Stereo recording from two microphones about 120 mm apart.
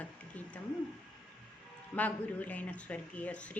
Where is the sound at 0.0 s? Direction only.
10° left (ahead or behind).